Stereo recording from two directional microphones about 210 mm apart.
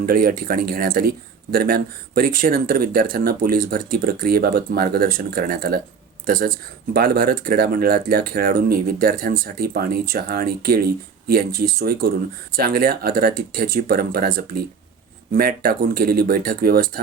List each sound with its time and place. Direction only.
0.0 s speech: 45° right (ahead or behind)